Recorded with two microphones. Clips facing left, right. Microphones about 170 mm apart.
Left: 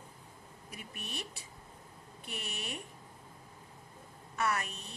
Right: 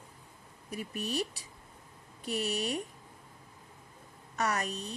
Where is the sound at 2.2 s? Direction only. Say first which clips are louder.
Right 11 dB; 35° right (ahead or behind).